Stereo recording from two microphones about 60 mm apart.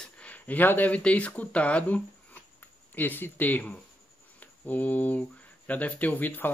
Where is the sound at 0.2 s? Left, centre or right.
Left.